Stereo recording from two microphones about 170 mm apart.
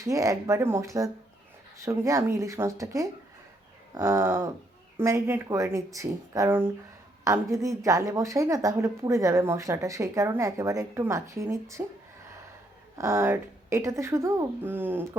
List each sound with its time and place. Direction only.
0.0 s speech: 20° right (ahead or behind)
13.0 s speech: 15° right (ahead or behind)